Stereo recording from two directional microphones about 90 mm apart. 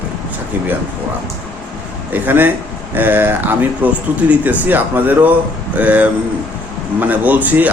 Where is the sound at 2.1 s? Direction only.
20° right (ahead or behind).